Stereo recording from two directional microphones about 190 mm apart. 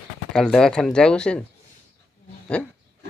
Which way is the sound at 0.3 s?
5° left (ahead or behind).